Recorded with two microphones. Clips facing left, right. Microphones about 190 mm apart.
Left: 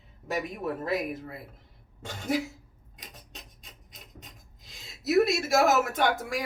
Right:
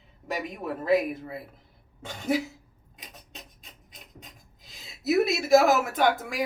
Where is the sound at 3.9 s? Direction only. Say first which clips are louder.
Right 1 dB; centre (ahead or behind).